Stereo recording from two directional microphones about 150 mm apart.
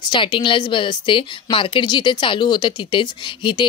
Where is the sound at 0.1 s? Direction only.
30° left (ahead or behind).